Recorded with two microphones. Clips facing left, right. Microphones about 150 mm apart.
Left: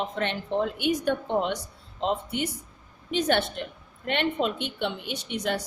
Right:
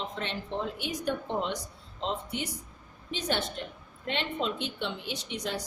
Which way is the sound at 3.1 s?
60° left (ahead or behind).